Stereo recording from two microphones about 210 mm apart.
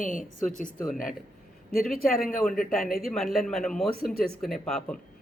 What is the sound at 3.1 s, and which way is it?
Speech, centre (ahead or behind).